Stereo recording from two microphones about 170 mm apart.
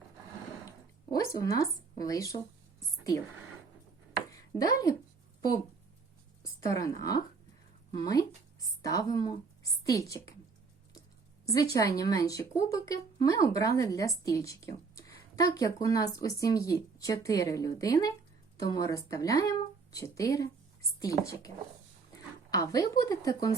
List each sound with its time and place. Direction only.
1.4 s speech: 20° left (ahead or behind)
4.3 s a sound: 20° left (ahead or behind)
6.4 s a woman's voice: 20° left (ahead or behind)
11.4 s speech: 20° left (ahead or behind)